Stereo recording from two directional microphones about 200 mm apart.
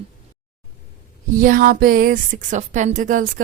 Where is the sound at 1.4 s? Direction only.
45° right (ahead or behind).